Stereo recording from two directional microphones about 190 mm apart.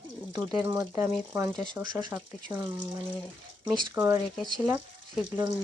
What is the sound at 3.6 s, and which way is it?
Speech, 25° right (ahead or behind).